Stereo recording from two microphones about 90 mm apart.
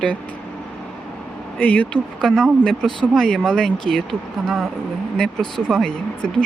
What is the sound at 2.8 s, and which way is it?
Speech, 5° left (ahead or behind).